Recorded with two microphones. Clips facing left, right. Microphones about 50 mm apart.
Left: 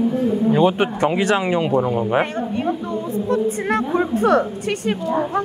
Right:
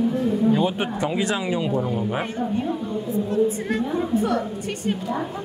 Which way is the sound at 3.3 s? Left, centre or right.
Left.